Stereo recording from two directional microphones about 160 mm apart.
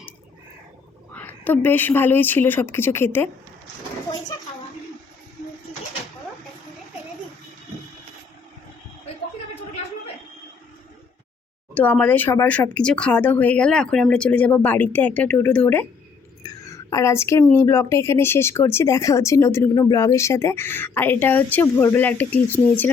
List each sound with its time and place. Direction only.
1.1 s speech: 10° left (ahead or behind)
11.7 s speech: 10° left (ahead or behind)
16.4 s a sound: 20° left (ahead or behind)
17.4 s speech: 15° left (ahead or behind)